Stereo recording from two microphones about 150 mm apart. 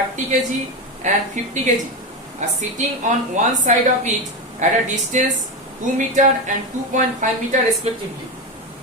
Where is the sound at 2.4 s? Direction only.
50° right (ahead or behind).